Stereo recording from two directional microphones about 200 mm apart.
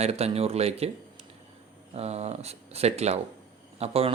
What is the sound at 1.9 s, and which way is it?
Speech, 30° right (ahead or behind).